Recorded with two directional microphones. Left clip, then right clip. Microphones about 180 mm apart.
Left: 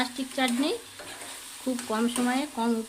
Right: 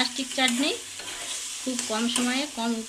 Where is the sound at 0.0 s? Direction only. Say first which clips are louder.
Right 3 dB; 30° left (ahead or behind).